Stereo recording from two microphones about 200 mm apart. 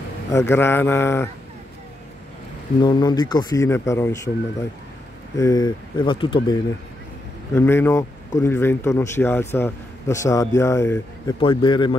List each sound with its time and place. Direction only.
0.3 s a man's voice: 15° left (ahead or behind)
2.8 s a man's voice: 20° left (ahead or behind)
5.4 s speech: 20° left (ahead or behind)
7.5 s a man's voice: 10° left (ahead or behind)